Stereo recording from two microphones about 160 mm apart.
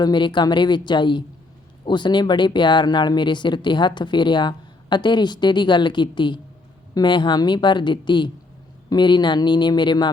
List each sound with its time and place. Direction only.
0.0 s speech: 30° left (ahead or behind)